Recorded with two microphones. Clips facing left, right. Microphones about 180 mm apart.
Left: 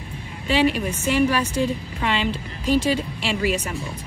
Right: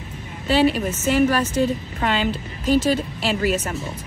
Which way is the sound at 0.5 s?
40° right (ahead or behind).